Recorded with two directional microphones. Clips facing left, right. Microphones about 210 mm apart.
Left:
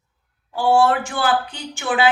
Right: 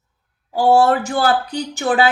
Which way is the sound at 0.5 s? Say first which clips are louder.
Right 3 dB; 40° right (ahead or behind).